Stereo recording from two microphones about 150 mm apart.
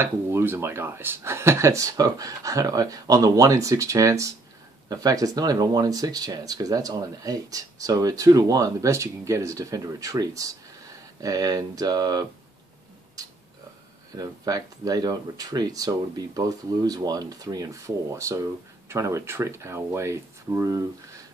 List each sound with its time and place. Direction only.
0.0 s speech: 15° right (ahead or behind)
14.1 s speech: 25° right (ahead or behind)